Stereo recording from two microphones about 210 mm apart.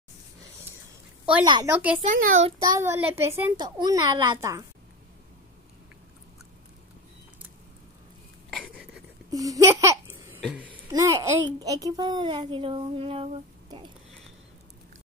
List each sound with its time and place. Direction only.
1.4 s speech: 20° right (ahead or behind)
1.7 s a child's voice: 5° right (ahead or behind)
2.1 s a child's voice: 40° right (ahead or behind)
2.6 s a child's voice: 10° right (ahead or behind)
8.5 s a sound: centre (ahead or behind)
9.3 s a sound: 15° right (ahead or behind)
10.9 s a child's voice: 15° right (ahead or behind)